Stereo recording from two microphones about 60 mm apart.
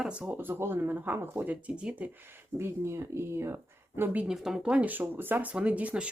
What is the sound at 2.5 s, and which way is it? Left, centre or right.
Speech, right.